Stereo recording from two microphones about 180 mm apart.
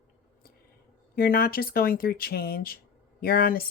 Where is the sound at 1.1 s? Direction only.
55° left (ahead or behind).